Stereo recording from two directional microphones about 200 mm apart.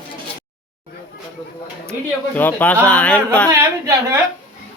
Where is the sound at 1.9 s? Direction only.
10° left (ahead or behind).